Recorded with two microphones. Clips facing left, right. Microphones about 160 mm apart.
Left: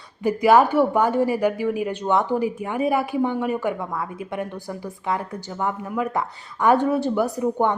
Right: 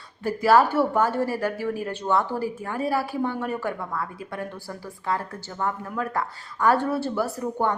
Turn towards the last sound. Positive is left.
turn(degrees=15)  # may be behind; listen again after turning